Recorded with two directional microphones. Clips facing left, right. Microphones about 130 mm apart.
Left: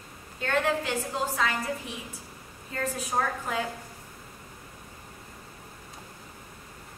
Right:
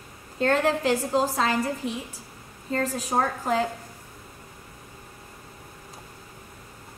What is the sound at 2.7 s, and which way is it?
Speech, 35° right (ahead or behind).